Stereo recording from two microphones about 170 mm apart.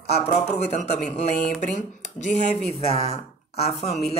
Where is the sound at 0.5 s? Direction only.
40° left (ahead or behind).